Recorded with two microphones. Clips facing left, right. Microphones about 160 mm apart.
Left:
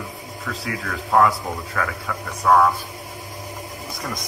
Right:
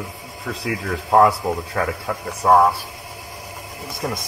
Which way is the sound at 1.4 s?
25° right (ahead or behind).